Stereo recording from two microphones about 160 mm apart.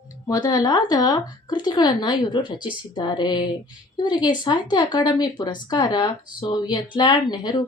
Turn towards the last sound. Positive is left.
turn(degrees=25)  # may be behind; listen again after turning